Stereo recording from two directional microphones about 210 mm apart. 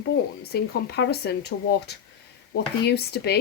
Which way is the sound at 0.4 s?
50° left (ahead or behind).